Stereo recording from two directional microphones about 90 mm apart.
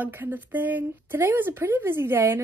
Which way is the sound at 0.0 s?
20° right (ahead or behind).